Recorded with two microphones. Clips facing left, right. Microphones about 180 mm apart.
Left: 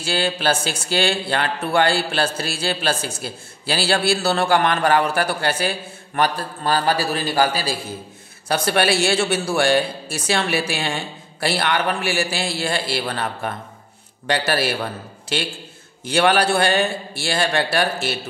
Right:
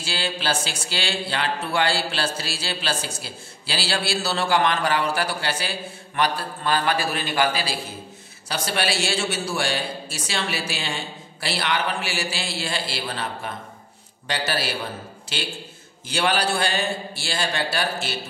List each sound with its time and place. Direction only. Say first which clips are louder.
0.0 s speech: left 6 dB; 55° left (ahead or behind)
8.5 s a man's voice: left 7 dB; 55° left (ahead or behind)
16.1 s a man's voice: left 6 dB; 60° left (ahead or behind)